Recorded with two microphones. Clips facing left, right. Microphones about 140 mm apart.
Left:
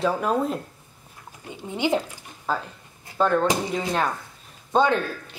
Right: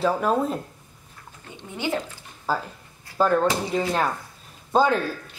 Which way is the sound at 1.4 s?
15° left (ahead or behind).